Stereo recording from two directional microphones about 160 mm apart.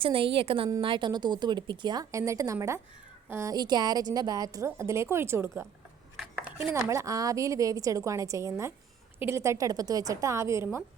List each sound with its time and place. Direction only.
0.0 s a woman's voice: 35° right (ahead or behind); by 5.6 s 15° right (ahead or behind)
6.1 s a sound: centre (ahead or behind)
6.7 s a woman's voice: 20° right (ahead or behind)